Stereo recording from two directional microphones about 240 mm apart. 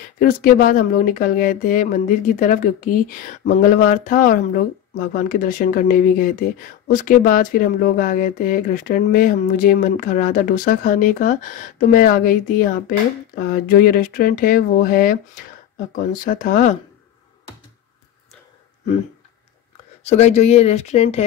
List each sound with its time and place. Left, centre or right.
0.2 s speech: left
20.0 s speech: left